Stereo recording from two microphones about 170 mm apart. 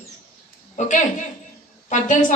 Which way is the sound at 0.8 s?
45° left (ahead or behind).